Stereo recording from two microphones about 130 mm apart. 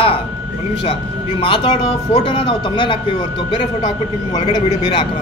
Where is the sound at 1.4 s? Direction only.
40° left (ahead or behind).